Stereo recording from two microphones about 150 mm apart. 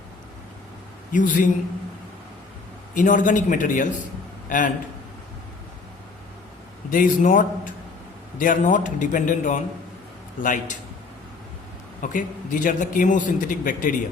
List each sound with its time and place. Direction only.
1.1 s a man's voice: 60° left (ahead or behind)
2.9 s a man's voice: 60° left (ahead or behind)
6.9 s a man's voice: 60° left (ahead or behind)
12.0 s a man's voice: 60° left (ahead or behind)